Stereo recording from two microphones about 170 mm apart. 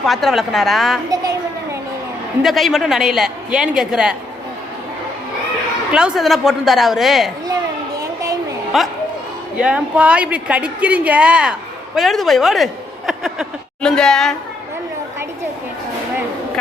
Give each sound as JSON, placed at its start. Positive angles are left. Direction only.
{"t": 0.0, "sound": "a woman's voice", "side_deg": 0}
{"t": 2.4, "sound": "a woman's voice", "side_deg": 0}
{"t": 5.9, "sound": "a woman's voice", "side_deg": -5}
{"t": 7.4, "sound": "a sound", "side_deg": -20}
{"t": 8.7, "sound": "a woman's voice", "side_deg": 0}